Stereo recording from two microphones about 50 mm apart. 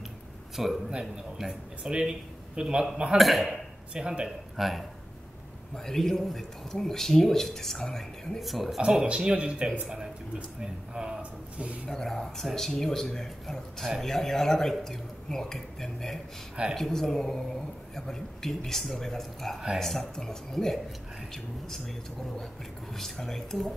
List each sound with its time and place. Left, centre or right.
0.6 s speech: centre
1.8 s a man's voice: centre
3.2 s speech: centre
3.9 s speech: centre
4.6 s speech: centre
5.9 s speech: centre
8.4 s speech: centre
9.0 s speech: centre
9.8 s a sound: centre
10.6 s a sound: centre
11.9 s speech: centre